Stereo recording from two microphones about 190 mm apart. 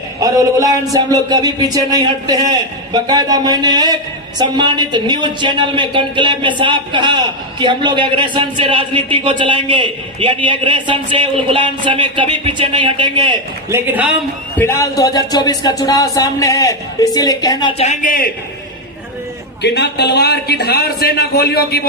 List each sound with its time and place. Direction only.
0.2 s a woman's voice: 20° right (ahead or behind)
13.7 s a man's voice: 10° right (ahead or behind)
14.6 s speech: 15° left (ahead or behind); by 18.3 s 45° left (ahead or behind)
19.6 s a man's voice: 60° left (ahead or behind)